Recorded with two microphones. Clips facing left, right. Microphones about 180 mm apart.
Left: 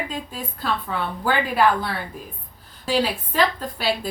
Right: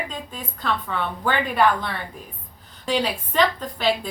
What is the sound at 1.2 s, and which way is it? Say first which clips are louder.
A woman's voice: left 1 dB; 5° left (ahead or behind).